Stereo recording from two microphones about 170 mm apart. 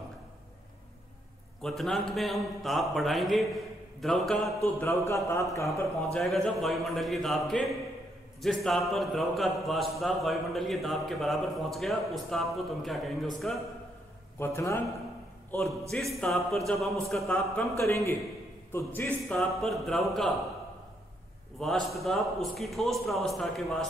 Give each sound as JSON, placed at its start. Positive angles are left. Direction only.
{"t": 1.6, "sound": "speech", "side_deg": 0}
{"t": 4.7, "sound": "speech", "side_deg": 15}
{"t": 6.1, "sound": "speech", "side_deg": 0}
{"t": 14.4, "sound": "speech", "side_deg": 15}
{"t": 15.9, "sound": "speech", "side_deg": 0}
{"t": 17.7, "sound": "speech", "side_deg": 15}
{"t": 21.5, "sound": "speech", "side_deg": 0}